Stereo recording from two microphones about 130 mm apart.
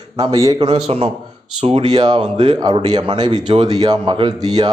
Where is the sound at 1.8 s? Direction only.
35° right (ahead or behind).